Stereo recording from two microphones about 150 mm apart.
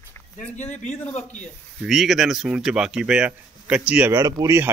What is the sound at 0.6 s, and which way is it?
Speech, 50° left (ahead or behind).